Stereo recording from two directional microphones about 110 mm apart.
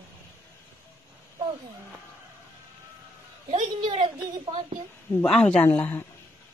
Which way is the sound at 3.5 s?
55° right (ahead or behind).